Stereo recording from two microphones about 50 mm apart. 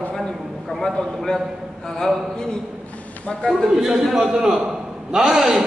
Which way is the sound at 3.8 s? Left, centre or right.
Centre.